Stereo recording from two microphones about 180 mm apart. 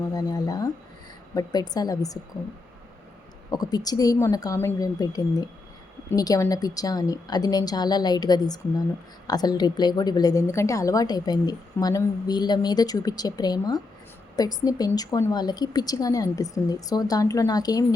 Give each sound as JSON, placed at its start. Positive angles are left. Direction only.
{"t": 0.1, "sound": "a woman's voice", "side_deg": 20}
{"t": 3.5, "sound": "a woman's voice", "side_deg": 20}